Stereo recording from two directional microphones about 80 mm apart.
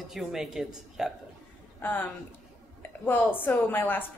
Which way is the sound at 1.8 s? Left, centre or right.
Left.